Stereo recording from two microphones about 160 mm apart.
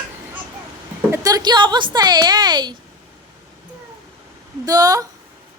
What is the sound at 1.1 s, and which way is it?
Speech, 25° right (ahead or behind).